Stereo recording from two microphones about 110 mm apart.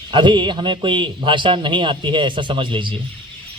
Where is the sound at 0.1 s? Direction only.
45° right (ahead or behind).